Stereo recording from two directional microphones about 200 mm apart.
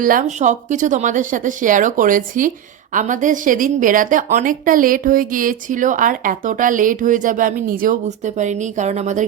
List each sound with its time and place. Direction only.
0.0 s a woman's voice: 40° right (ahead or behind)